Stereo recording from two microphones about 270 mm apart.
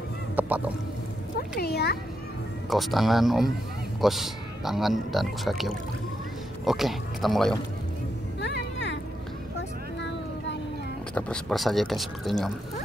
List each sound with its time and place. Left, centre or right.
0.4 s a sound: centre
1.6 s a child's voice: left
2.7 s speech: centre
8.4 s music: left
9.6 s vehicle: left
11.1 s speech: centre